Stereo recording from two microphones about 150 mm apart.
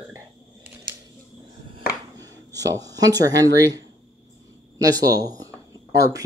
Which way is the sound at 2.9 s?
25° right (ahead or behind).